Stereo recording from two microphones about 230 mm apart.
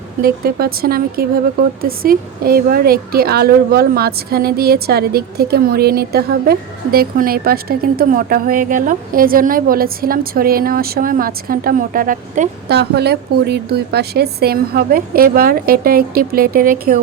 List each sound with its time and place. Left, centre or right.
0.2 s a woman's voice: right